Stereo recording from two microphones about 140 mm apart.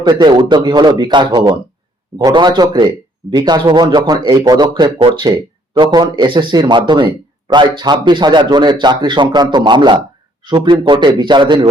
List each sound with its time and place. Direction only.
0.0 s speech: 30° right (ahead or behind)